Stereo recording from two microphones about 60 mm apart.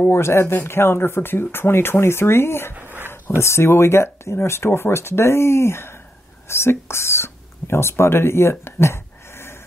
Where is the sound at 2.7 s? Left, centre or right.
Right.